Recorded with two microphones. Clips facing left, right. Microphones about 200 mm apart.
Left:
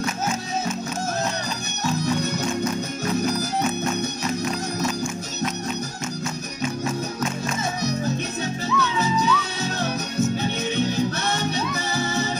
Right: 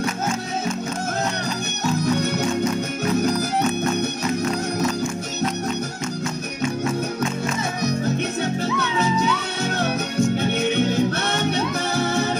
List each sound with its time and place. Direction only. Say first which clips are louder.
8.4 s music: right 2 dB; 60° right (ahead or behind)